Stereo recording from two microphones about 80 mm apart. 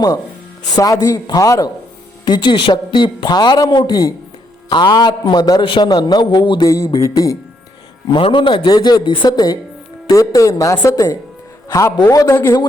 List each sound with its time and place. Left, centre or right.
0.7 s speech: left
2.2 s a woman's voice: left
5.8 s a man's voice: left
6.7 s a man's voice: left
8.0 s speech: left
8.7 s a man's voice: left
10.1 s a man's voice: left